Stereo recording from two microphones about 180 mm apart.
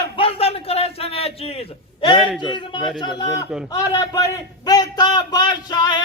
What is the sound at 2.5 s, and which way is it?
A man's voice, 25° left (ahead or behind).